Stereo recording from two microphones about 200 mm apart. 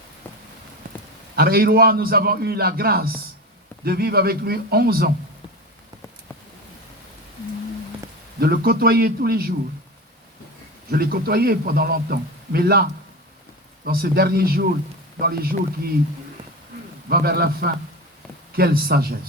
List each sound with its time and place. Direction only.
1.4 s a man's voice: 50° right (ahead or behind)
8.4 s a man's voice: 50° right (ahead or behind)
10.9 s a man's voice: 50° right (ahead or behind)
17.1 s a man's voice: 50° right (ahead or behind)